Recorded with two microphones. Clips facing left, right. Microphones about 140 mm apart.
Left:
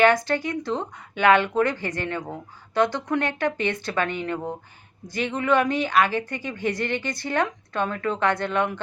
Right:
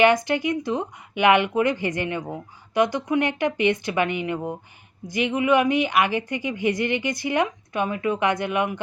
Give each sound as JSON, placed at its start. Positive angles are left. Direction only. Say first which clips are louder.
{"t": 0.0, "sound": "speech", "louder": "right 1 dB", "side_deg": -15}